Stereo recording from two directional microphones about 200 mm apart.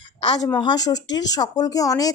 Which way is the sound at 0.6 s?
20° left (ahead or behind).